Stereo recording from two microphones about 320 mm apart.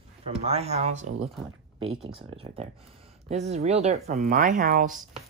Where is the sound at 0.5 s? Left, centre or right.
Centre.